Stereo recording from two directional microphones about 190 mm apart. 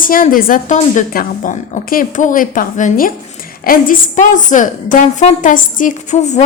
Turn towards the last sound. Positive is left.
turn(degrees=35)  # may be behind; listen again after turning